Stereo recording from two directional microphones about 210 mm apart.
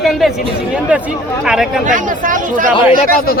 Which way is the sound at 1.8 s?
40° right (ahead or behind).